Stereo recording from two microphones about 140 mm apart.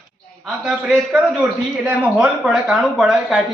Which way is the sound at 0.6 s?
5° right (ahead or behind).